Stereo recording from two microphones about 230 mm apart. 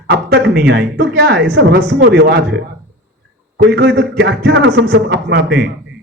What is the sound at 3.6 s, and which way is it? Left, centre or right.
A man's voice, right.